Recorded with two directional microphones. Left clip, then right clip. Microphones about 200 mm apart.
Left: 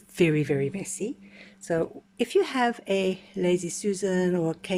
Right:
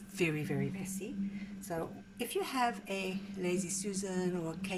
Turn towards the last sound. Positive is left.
turn(degrees=40)  # may be behind; listen again after turning